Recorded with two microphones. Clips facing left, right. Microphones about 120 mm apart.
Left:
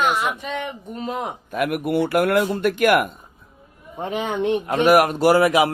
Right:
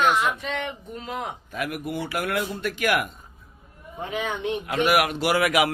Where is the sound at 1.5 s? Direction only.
55° left (ahead or behind).